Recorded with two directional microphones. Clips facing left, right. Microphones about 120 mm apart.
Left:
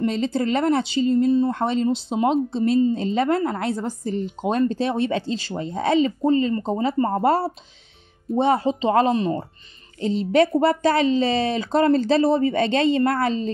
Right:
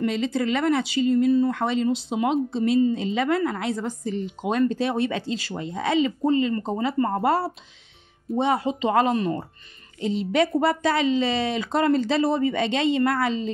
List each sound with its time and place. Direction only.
0.0 s speech: 35° left (ahead or behind)